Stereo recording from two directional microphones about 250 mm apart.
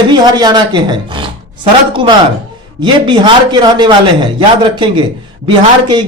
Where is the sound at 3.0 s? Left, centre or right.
Centre.